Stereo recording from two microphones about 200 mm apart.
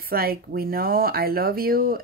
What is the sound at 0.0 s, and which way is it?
Speech, 50° right (ahead or behind).